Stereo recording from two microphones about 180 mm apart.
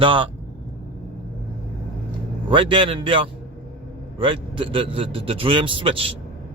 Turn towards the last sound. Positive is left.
turn(degrees=-30)  # may be behind; listen again after turning